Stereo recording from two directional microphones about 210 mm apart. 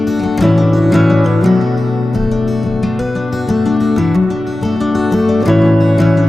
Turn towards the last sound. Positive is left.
turn(degrees=0)  # may be behind; listen again after turning